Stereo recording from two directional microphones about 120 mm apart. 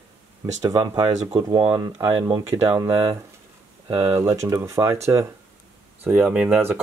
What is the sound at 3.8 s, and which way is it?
Speech, 55° right (ahead or behind).